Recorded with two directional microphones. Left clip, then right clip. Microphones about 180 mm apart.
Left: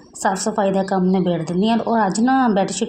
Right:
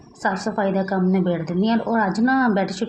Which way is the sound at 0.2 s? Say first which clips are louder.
Left 3 dB; 25° left (ahead or behind).